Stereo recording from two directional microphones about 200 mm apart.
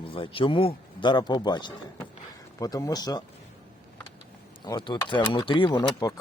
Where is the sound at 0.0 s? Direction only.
25° left (ahead or behind).